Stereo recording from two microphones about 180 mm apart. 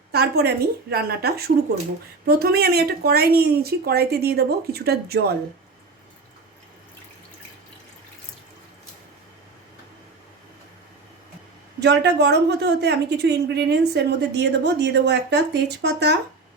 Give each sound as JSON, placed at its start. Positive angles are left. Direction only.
{"t": 0.1, "sound": "speech", "side_deg": -60}
{"t": 11.8, "sound": "a woman's voice", "side_deg": -70}